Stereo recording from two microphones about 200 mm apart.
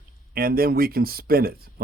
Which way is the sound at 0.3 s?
50° right (ahead or behind).